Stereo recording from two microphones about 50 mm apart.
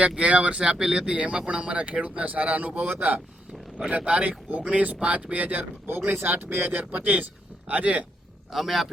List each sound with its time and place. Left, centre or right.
0.2 s a man's voice: right; by 1.1 s centre
1.1 s a man's voice: right
6.1 s a man's voice: right
8.5 s speech: centre